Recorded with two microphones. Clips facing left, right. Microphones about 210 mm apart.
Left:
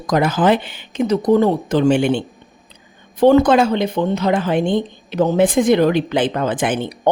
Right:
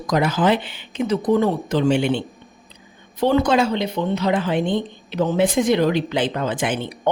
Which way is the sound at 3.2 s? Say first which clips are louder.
Left 6 dB; 50° left (ahead or behind).